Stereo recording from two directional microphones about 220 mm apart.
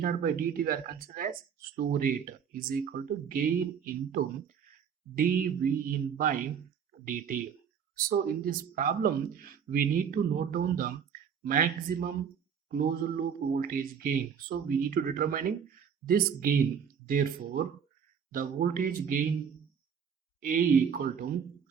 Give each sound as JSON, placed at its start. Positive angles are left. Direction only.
{"t": 0.0, "sound": "speech", "side_deg": -40}
{"t": 20.4, "sound": "speech", "side_deg": -40}